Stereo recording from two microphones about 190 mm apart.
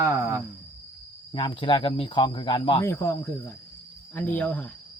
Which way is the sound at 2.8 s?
15° left (ahead or behind).